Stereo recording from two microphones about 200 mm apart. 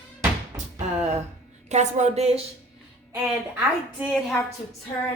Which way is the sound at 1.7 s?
35° right (ahead or behind).